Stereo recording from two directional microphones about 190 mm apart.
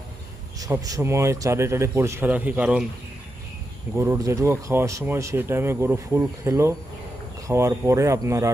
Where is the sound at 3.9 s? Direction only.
15° right (ahead or behind).